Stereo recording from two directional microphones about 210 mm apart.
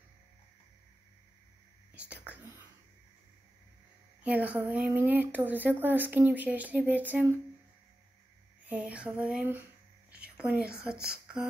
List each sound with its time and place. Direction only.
2.0 s whispering: 5° right (ahead or behind)
4.2 s speech: 5° right (ahead or behind)
8.6 s a sound: 5° right (ahead or behind)